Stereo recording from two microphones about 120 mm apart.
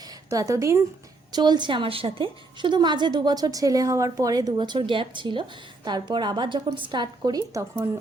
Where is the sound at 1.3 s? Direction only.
35° right (ahead or behind).